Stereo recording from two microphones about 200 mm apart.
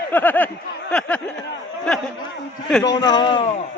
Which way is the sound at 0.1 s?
10° left (ahead or behind).